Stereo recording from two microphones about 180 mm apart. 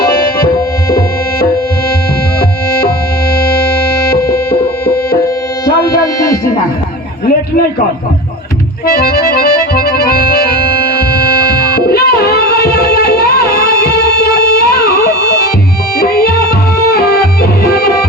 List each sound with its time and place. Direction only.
5.9 s music: 60° left (ahead or behind)
8.9 s accordion: 55° left (ahead or behind)
16.0 s music: 60° left (ahead or behind)